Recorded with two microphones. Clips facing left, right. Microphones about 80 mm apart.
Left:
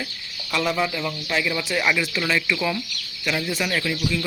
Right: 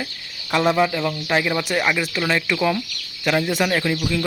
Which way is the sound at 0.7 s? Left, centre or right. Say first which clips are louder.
Right 5 dB; right.